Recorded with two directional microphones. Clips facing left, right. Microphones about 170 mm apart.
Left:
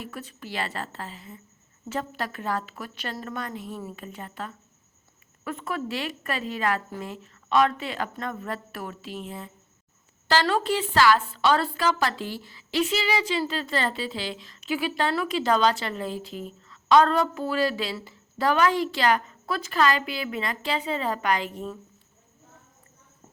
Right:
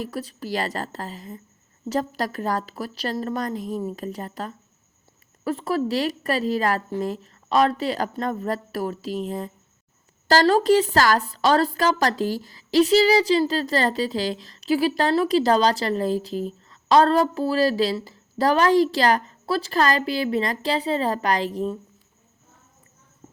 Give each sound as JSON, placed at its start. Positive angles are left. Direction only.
{"t": 0.0, "sound": "a woman's voice", "side_deg": -35}